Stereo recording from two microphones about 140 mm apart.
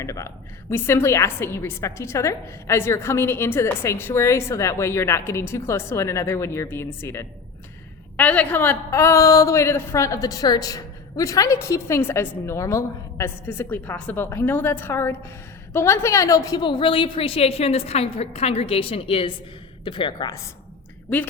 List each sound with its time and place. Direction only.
0.0 s a woman's voice: 20° left (ahead or behind)